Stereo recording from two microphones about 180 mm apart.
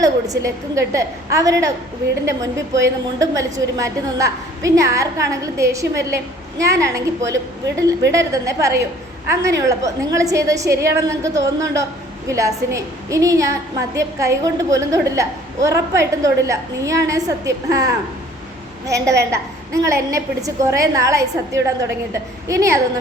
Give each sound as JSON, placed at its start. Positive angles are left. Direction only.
{"t": 0.0, "sound": "a woman's voice", "side_deg": -15}
{"t": 2.8, "sound": "a woman's voice", "side_deg": -20}